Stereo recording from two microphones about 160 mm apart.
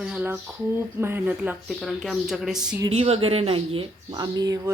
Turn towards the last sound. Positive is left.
turn(degrees=-25)  # may be behind; listen again after turning